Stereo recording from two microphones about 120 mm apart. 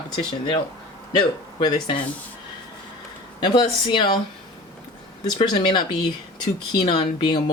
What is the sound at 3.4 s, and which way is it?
Speech, 40° left (ahead or behind).